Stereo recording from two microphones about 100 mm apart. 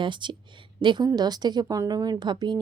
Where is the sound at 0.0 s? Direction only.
50° right (ahead or behind).